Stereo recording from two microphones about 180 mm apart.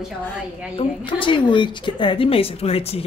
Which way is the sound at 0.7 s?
30° left (ahead or behind).